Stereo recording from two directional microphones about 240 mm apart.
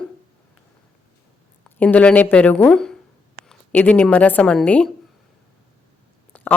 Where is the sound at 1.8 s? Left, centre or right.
Centre.